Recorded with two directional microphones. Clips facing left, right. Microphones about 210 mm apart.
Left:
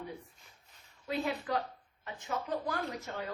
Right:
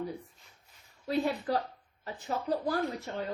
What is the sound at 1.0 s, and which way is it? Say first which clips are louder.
Speech: right 4 dB; 35° right (ahead or behind).